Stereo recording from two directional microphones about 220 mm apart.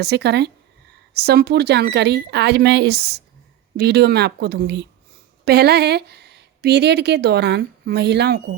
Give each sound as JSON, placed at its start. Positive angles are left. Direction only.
{"t": 0.0, "sound": "speech", "side_deg": -50}